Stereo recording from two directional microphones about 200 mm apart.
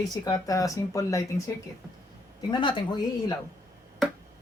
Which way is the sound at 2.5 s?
25° left (ahead or behind).